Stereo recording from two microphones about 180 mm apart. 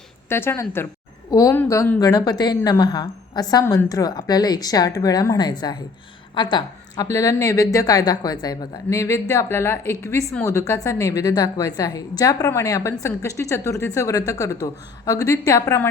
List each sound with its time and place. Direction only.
0.3 s a woman's voice: 15° left (ahead or behind)